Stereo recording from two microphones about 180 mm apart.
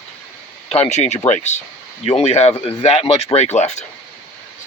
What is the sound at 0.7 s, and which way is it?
Speech, 35° left (ahead or behind).